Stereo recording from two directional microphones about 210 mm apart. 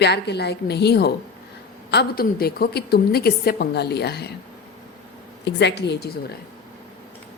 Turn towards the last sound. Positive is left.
turn(degrees=50)  # may be behind; listen again after turning